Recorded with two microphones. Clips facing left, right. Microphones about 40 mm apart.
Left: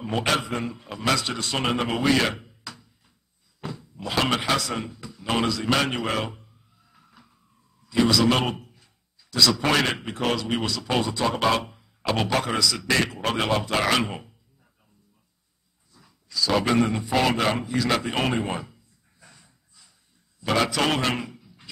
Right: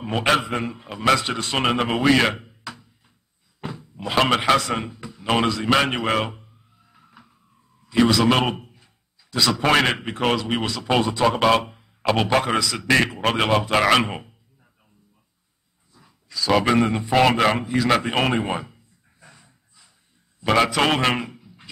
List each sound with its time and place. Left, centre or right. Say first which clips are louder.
0.0 s a man's voice: right 4 dB; right
6.9 s a sound: right 4 dB; right
7.9 s a man's voice: right 3 dB; right
15.9 s a man's voice: left 1 dB; right
17.6 s a sound: right 4 dB; right
20.3 s a man's voice: right 4 dB; right